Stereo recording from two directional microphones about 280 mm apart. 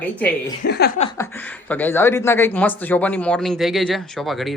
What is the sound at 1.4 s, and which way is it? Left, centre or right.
A woman's voice, centre.